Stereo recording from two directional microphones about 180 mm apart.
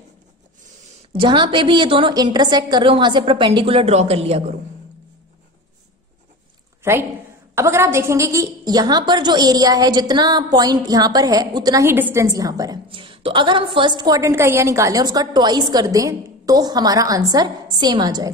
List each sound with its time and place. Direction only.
1.1 s a woman's voice: 25° right (ahead or behind)
6.8 s a woman's voice: 15° right (ahead or behind)